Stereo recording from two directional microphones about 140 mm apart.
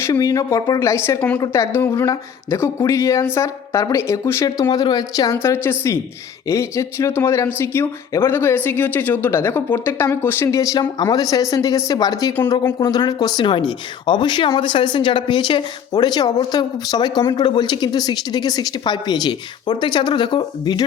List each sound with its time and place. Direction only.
0.0 s speech: 25° left (ahead or behind)